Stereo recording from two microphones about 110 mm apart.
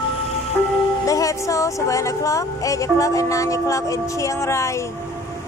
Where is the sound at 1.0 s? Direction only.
30° left (ahead or behind).